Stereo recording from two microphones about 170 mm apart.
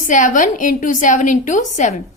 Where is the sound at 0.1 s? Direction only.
50° left (ahead or behind).